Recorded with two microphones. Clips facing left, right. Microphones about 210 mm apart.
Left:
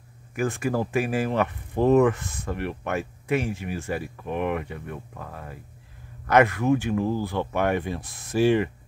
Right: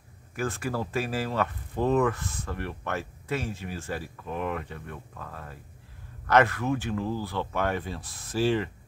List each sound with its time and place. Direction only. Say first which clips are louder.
0.3 s speech: left 5 dB; 15° left (ahead or behind)